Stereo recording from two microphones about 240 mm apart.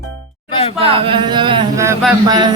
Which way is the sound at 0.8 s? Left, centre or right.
Right.